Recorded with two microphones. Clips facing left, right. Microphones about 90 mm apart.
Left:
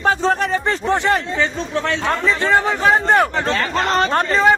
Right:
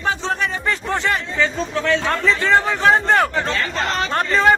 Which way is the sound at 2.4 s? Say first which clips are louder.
Left 1 dB; 20° left (ahead or behind).